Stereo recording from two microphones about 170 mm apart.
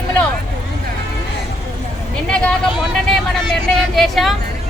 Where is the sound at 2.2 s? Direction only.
5° left (ahead or behind).